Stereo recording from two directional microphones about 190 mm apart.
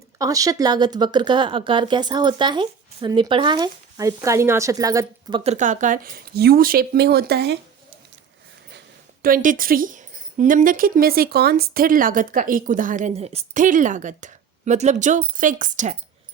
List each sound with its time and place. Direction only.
0.2 s speech: 20° right (ahead or behind)
5.4 s a woman's voice: 35° right (ahead or behind); by 7.6 s 60° right (ahead or behind)
9.2 s a woman's voice: 45° right (ahead or behind)